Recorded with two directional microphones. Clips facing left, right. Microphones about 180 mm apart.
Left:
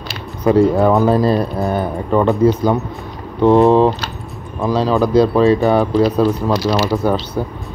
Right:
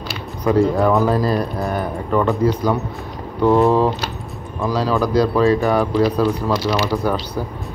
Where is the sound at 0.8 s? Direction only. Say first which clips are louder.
Left 3 dB; 25° left (ahead or behind).